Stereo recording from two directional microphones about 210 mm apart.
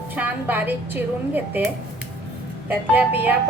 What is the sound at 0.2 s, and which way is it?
A woman's voice, 10° right (ahead or behind).